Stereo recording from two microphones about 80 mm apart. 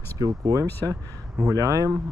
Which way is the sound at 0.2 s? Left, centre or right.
Right.